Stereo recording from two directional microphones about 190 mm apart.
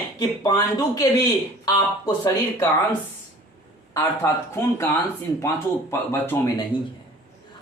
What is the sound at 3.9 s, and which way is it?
Speech, 15° left (ahead or behind).